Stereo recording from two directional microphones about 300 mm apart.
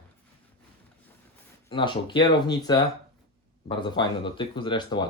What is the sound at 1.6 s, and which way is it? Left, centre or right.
Speech, centre.